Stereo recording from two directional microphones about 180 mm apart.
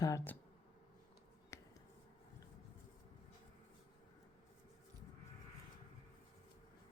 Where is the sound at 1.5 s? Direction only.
15° left (ahead or behind).